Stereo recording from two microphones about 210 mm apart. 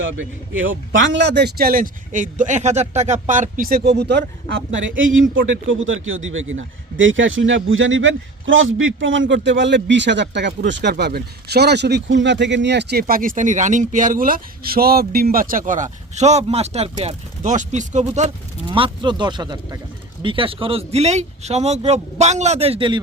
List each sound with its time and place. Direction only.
0.0 s speech: 70° right (ahead or behind); by 18.3 s 35° right (ahead or behind)
18.7 s speech: 25° right (ahead or behind)